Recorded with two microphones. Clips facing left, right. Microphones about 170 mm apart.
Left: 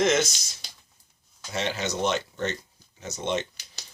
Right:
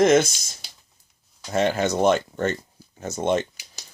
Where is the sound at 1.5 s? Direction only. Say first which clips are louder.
Right 8 dB; 50° right (ahead or behind).